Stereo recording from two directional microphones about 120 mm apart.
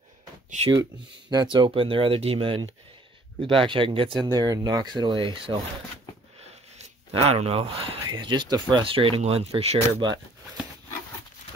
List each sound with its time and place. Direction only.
1.3 s speech: 40° right (ahead or behind)
7.1 s speech: 60° right (ahead or behind)